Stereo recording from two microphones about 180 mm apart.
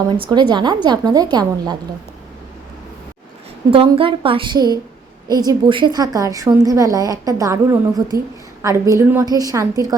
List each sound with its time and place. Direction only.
0.1 s a woman's voice: 25° right (ahead or behind)
3.7 s a woman's voice: 30° right (ahead or behind)